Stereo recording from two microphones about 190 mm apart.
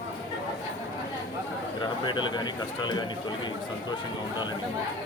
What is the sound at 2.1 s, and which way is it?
Speech, 25° left (ahead or behind).